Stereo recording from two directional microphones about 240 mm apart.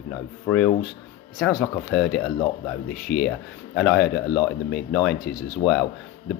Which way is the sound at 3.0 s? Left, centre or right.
Left.